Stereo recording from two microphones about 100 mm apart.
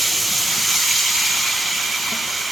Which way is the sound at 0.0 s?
Centre (ahead or behind).